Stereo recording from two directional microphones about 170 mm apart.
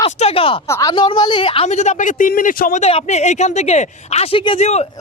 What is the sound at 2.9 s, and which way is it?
Speech, 40° left (ahead or behind).